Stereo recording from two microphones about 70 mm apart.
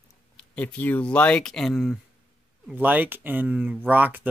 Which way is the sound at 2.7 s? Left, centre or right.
Right.